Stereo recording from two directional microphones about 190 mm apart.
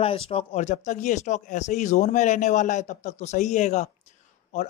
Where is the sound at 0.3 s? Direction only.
30° left (ahead or behind).